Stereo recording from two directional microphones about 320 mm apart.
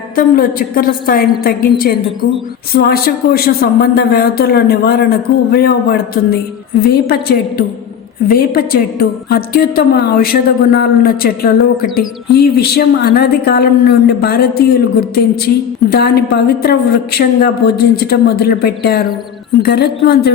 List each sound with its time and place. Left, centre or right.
0.2 s a woman's voice: left